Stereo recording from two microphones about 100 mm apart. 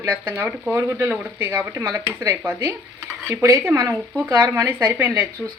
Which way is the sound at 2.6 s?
25° right (ahead or behind).